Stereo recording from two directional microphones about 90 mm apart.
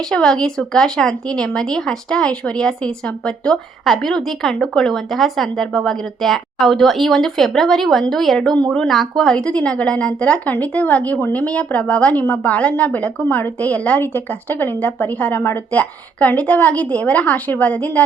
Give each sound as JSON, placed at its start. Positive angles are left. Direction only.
{"t": 0.1, "sound": "a woman's voice", "side_deg": 10}